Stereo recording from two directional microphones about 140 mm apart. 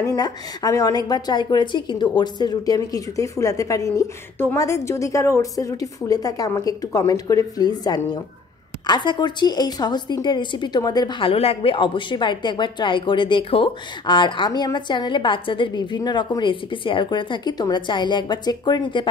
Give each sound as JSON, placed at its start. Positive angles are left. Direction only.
{"t": 0.0, "sound": "a woman's voice", "side_deg": 30}